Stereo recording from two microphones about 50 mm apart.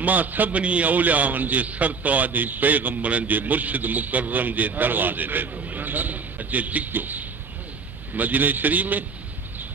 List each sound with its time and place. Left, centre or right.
0.0 s a man's voice: right